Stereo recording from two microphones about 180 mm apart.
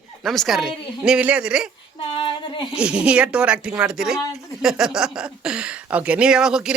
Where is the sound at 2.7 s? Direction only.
5° right (ahead or behind).